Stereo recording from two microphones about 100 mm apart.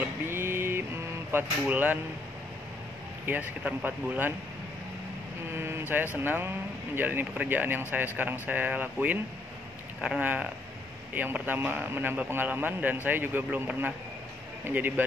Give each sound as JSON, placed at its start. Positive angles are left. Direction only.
{"t": 0.0, "sound": "a sound", "side_deg": -25}
{"t": 3.3, "sound": "speech", "side_deg": -15}
{"t": 5.5, "sound": "a man's voice", "side_deg": -25}